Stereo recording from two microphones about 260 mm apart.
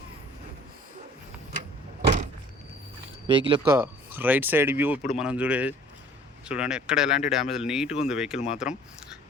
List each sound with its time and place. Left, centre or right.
2.0 s vehicle: right
3.2 s speech: centre
3.8 s speech: centre